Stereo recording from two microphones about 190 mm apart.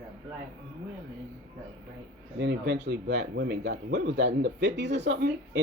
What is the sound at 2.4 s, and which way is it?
Speech, 65° right (ahead or behind).